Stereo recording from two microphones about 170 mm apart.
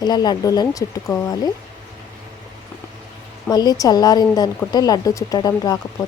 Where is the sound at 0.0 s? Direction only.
25° left (ahead or behind).